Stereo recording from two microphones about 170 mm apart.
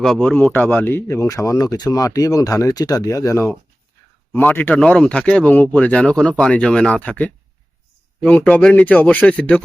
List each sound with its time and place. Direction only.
0.0 s speech: 5° left (ahead or behind)